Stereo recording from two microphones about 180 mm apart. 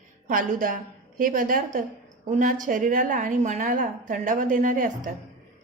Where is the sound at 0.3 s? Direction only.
50° right (ahead or behind).